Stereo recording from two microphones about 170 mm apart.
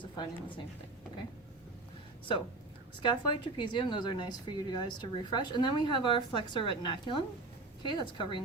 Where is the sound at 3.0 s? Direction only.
25° left (ahead or behind).